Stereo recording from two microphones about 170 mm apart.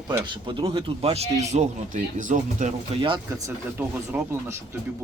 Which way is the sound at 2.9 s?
35° right (ahead or behind).